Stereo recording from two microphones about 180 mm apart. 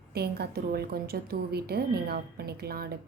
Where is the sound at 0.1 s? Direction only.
60° right (ahead or behind).